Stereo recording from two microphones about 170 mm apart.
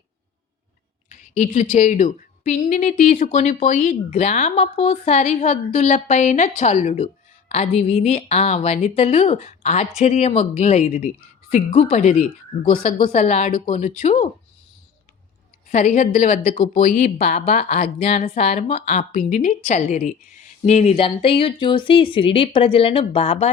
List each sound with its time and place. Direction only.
1.1 s a woman's voice: 45° left (ahead or behind)
13.1 s a woman's voice: 40° left (ahead or behind)
13.5 s a woman's voice: 50° left (ahead or behind)
15.7 s speech: 45° left (ahead or behind)
17.4 s a woman's voice: 40° left (ahead or behind)